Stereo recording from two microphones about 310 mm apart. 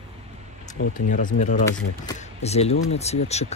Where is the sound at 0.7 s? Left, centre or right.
Left.